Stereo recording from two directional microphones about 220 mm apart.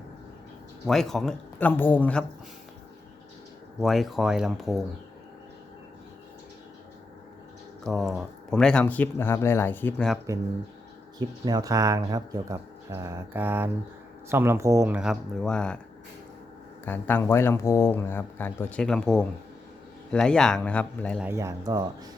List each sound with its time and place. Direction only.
0.9 s speech: centre (ahead or behind)
3.8 s speech: centre (ahead or behind)
7.9 s speech: centre (ahead or behind)
11.2 s speech: 15° right (ahead or behind); by 15.8 s 5° left (ahead or behind)
16.8 s speech: 10° left (ahead or behind)
21.2 s speech: 15° right (ahead or behind)